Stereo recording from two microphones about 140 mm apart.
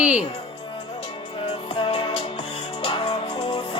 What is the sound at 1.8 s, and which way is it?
Music, 35° left (ahead or behind).